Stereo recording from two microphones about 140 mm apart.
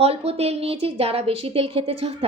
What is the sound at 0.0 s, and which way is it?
A woman's voice, 45° right (ahead or behind).